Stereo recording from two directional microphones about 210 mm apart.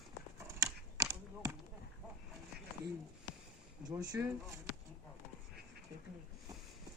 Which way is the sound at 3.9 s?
15° right (ahead or behind).